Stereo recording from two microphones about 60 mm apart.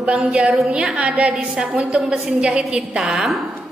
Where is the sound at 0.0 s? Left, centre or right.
Centre.